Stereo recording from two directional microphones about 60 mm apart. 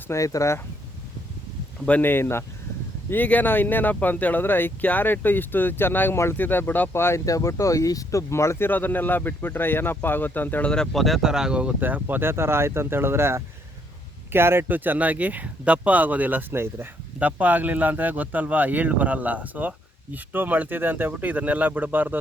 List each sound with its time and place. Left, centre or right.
0.1 s speech: left
1.9 s speech: left
6.9 s speech: left
7.3 s speech: left
8.3 s speech: left
10.9 s speech: centre
11.2 s speech: centre
11.8 s speech: right
16.5 s speech: right
17.2 s speech: right